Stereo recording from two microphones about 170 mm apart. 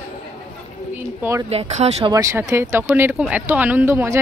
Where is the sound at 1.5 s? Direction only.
40° right (ahead or behind).